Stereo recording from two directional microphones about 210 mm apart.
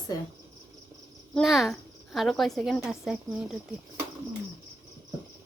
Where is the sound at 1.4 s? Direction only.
Centre (ahead or behind).